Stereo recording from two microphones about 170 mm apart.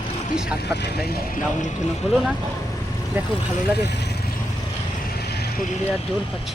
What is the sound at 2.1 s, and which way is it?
Speech, 5° left (ahead or behind).